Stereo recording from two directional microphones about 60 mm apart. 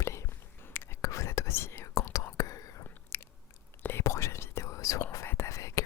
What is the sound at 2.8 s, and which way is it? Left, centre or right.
Biting, left.